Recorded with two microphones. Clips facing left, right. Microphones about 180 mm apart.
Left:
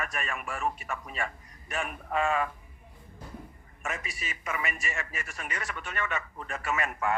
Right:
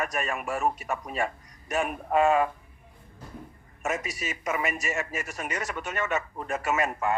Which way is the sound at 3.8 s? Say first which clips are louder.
Right 6 dB; 40° right (ahead or behind).